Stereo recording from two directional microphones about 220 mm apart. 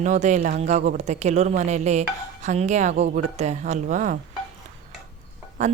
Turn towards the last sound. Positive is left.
turn(degrees=-30)  # may be behind; listen again after turning